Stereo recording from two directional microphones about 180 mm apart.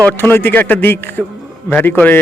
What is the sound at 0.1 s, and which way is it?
Speech, 10° left (ahead or behind).